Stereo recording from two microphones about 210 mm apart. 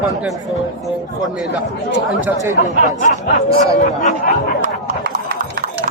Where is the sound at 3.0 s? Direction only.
35° left (ahead or behind).